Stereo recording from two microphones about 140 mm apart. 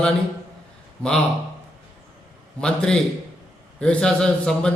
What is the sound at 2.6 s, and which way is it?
A man's voice, 5° left (ahead or behind).